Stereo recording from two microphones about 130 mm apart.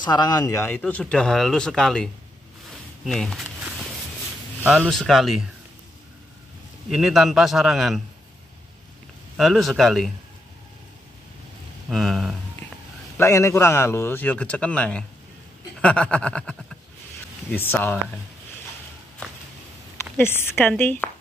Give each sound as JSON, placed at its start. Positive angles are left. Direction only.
{"t": 0.0, "sound": "speech", "side_deg": 35}
{"t": 0.7, "sound": "speech", "side_deg": 10}
{"t": 3.1, "sound": "speech", "side_deg": 0}
{"t": 4.7, "sound": "speech", "side_deg": 5}
{"t": 6.9, "sound": "speech", "side_deg": -5}
{"t": 9.4, "sound": "speech", "side_deg": 0}
{"t": 11.9, "sound": "speech", "side_deg": 0}
{"t": 13.2, "sound": "a man's voice", "side_deg": 20}
{"t": 20.0, "sound": "a man's voice", "side_deg": 20}